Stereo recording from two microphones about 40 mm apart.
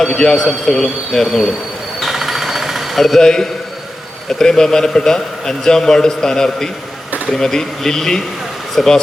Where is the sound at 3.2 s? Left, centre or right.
Centre.